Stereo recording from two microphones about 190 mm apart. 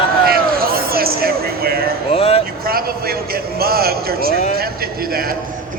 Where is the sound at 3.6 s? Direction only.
55° right (ahead or behind).